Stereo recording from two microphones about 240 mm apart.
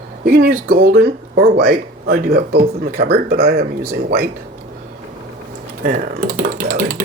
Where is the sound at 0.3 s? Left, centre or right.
Right.